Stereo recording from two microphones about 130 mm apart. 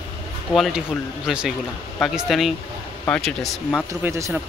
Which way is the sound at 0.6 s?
Centre (ahead or behind).